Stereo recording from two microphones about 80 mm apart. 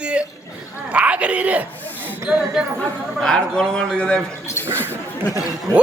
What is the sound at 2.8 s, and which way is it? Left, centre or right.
A man's voice, centre.